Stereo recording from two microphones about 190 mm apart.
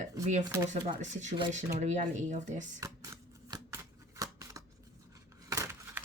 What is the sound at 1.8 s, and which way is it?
Speech, 40° right (ahead or behind).